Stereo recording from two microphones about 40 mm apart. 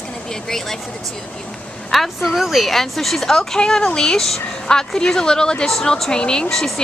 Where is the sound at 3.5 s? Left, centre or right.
Centre.